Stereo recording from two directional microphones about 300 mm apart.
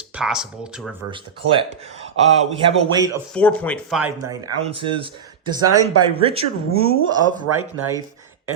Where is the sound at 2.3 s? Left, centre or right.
Centre.